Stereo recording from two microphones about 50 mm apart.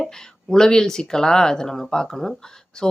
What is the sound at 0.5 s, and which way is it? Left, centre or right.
Speech, centre.